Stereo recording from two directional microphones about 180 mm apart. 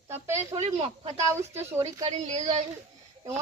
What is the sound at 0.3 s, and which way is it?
Speech, 35° right (ahead or behind).